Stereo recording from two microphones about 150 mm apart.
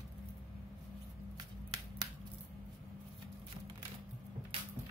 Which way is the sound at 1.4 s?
30° right (ahead or behind).